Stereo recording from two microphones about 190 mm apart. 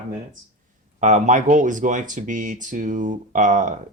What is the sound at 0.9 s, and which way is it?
Speech, 40° right (ahead or behind).